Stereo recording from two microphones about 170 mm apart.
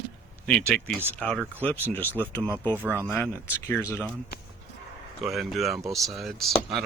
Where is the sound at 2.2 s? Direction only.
15° right (ahead or behind).